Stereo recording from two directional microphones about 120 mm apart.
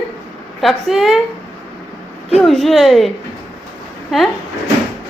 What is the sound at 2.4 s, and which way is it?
Speech, centre (ahead or behind).